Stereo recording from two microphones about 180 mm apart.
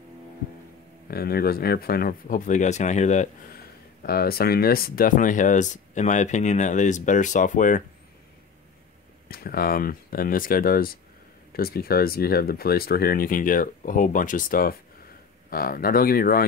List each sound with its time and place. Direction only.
1.0 s speech: 55° left (ahead or behind); by 3.5 s 40° left (ahead or behind)
4.0 s speech: 55° left (ahead or behind)
9.3 s speech: 55° left (ahead or behind)